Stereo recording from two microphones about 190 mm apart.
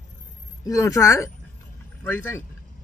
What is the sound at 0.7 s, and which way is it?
A man's voice, 15° left (ahead or behind).